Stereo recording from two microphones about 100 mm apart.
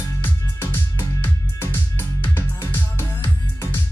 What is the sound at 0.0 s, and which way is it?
Music, 25° left (ahead or behind).